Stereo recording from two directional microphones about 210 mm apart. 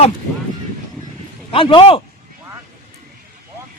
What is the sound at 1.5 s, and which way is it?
Speech, 25° left (ahead or behind).